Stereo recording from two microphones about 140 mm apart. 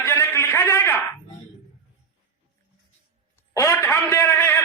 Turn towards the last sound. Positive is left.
turn(degrees=15)  # may be behind; listen again after turning